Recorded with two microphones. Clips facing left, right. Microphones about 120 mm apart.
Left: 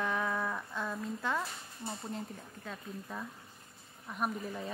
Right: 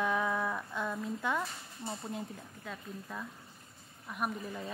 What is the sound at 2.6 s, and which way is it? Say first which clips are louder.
Speech: even; 10° left (ahead or behind).